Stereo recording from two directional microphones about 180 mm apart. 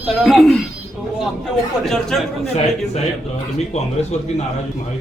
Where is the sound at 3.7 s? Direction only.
40° left (ahead or behind).